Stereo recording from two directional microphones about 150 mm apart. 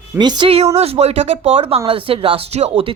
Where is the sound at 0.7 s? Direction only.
45° right (ahead or behind).